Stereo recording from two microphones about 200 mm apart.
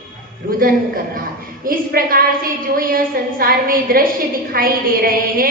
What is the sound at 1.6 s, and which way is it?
A woman's voice, 45° right (ahead or behind).